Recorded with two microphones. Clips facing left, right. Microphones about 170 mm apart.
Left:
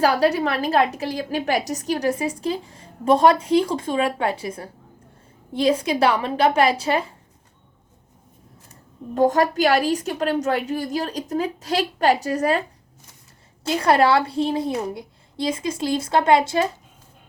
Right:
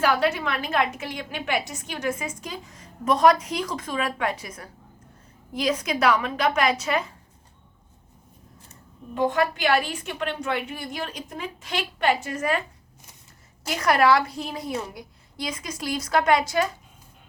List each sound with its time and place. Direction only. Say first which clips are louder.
0.0 s a woman's voice: left 4 dB; 35° left (ahead or behind)
9.1 s a woman's voice: left 5 dB; 40° left (ahead or behind)
13.7 s a woman's voice: left 3 dB; 30° left (ahead or behind)